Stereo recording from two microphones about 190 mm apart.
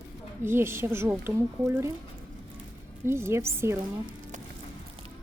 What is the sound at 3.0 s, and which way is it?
Speech, 15° right (ahead or behind).